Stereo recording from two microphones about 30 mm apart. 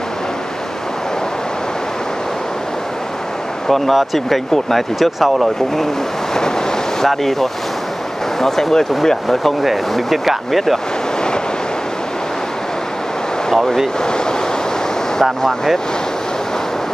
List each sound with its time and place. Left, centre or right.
3.6 s speech: centre
7.1 s speech: centre
9.6 s speech: centre
15.4 s speech: centre